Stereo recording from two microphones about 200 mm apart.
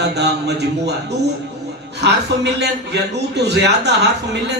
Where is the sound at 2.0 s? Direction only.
55° right (ahead or behind).